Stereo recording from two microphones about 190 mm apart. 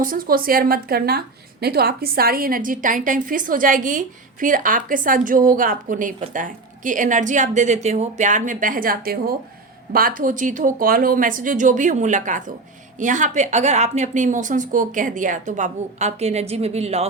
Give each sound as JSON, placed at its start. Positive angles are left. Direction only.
{"t": 0.0, "sound": "a woman's voice", "side_deg": -45}